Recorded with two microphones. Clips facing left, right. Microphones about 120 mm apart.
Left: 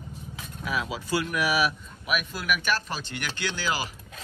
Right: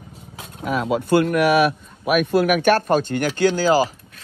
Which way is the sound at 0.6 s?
50° right (ahead or behind).